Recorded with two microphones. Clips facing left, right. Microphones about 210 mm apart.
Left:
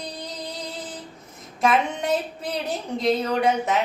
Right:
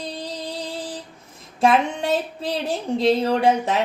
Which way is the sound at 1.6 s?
30° right (ahead or behind).